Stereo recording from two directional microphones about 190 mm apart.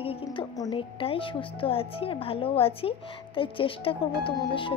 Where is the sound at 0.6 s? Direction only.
25° left (ahead or behind).